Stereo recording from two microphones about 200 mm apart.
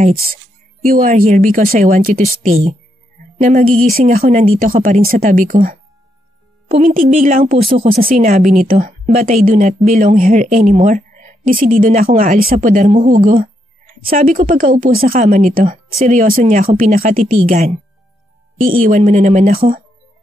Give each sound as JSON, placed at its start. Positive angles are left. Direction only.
{"t": 0.0, "sound": "a woman's voice", "side_deg": -45}
{"t": 18.9, "sound": "a woman's voice", "side_deg": -35}